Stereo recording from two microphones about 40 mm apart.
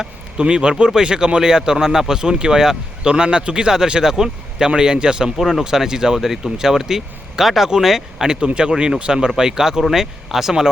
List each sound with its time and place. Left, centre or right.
0.3 s speech: right
5.4 s speech: centre
8.5 s speech: centre